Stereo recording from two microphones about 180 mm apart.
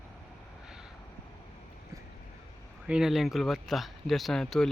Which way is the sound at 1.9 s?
15° right (ahead or behind).